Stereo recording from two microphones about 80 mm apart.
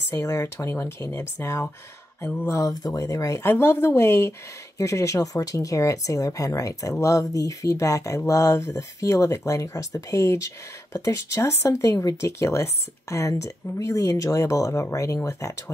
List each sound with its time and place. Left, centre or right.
0.1 s speech: left
3.4 s speech: left